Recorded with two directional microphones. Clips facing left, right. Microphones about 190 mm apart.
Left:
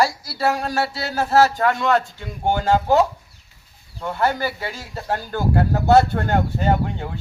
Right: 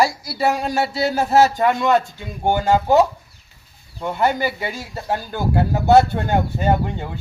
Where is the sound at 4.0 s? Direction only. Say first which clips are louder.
Right 2 dB; 15° right (ahead or behind).